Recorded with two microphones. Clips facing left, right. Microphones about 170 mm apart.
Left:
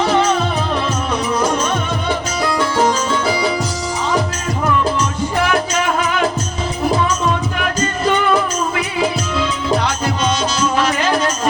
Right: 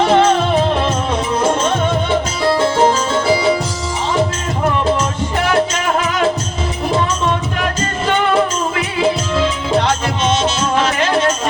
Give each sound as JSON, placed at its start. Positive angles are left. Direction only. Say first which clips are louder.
{"t": 0.0, "sound": "music", "louder": "right 3 dB", "side_deg": -55}
{"t": 2.5, "sound": "music", "louder": "right 4 dB", "side_deg": -30}